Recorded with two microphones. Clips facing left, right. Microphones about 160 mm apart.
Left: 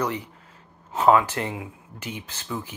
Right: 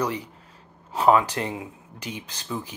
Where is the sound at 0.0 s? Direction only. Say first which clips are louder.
Even; 10° right (ahead or behind).